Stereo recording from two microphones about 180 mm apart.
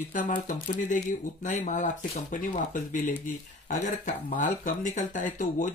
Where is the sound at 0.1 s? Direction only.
45° left (ahead or behind).